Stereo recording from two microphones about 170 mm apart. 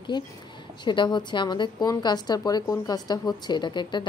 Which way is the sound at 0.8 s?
25° left (ahead or behind).